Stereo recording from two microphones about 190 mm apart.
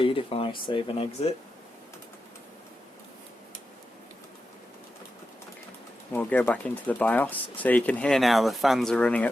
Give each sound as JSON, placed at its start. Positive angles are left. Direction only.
{"t": 0.0, "sound": "speech", "side_deg": 30}
{"t": 6.1, "sound": "speech", "side_deg": 10}